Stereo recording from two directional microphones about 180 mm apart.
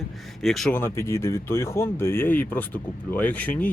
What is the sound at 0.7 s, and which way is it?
Speech, 15° left (ahead or behind).